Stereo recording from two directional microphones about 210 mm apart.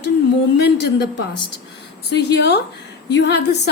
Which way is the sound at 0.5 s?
55° left (ahead or behind).